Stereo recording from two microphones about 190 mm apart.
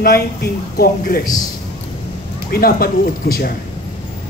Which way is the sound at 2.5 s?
55° left (ahead or behind).